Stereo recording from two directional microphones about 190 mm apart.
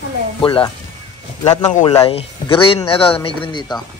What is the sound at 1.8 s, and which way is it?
Speech, 15° left (ahead or behind).